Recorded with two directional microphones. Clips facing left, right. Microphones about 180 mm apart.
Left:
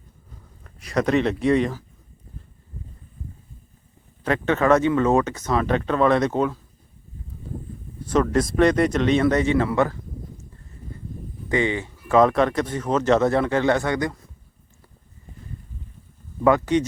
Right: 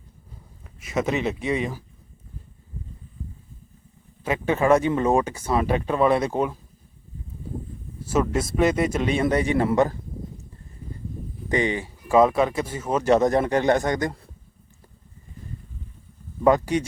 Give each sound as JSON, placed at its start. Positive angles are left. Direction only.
{"t": 0.6, "sound": "speech", "side_deg": -5}
{"t": 4.2, "sound": "speech", "side_deg": -10}
{"t": 8.0, "sound": "speech", "side_deg": -5}
{"t": 9.6, "sound": "a sound", "side_deg": -20}
{"t": 11.4, "sound": "speech", "side_deg": -15}
{"t": 13.8, "sound": "speech", "side_deg": -45}
{"t": 16.7, "sound": "speech", "side_deg": -10}